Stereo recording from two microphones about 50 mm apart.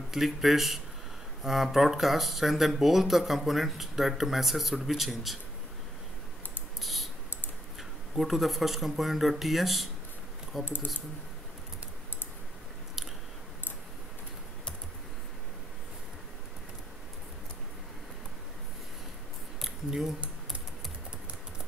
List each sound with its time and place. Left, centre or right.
0.1 s speech: centre
6.8 s typing: centre
8.2 s speech: centre
10.6 s speech: left
19.6 s a sound: centre